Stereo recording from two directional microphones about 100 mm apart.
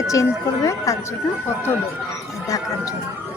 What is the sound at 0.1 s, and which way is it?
Speech, 30° left (ahead or behind).